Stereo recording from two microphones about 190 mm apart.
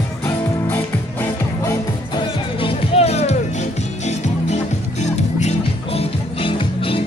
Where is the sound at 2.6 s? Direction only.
30° left (ahead or behind).